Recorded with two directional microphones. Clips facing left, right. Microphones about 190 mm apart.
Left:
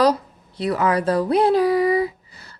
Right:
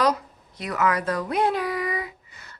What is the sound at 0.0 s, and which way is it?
Speech, 30° left (ahead or behind).